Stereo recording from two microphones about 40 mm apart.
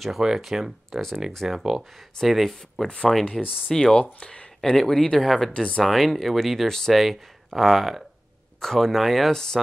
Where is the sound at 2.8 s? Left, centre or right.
Left.